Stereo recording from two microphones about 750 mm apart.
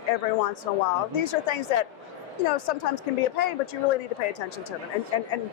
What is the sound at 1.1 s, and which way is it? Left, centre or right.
A woman's voice, left.